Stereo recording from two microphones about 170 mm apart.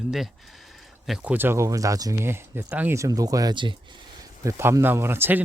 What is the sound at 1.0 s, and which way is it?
Speech, 5° right (ahead or behind).